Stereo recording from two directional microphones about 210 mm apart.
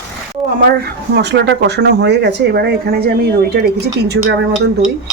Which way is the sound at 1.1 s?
55° right (ahead or behind).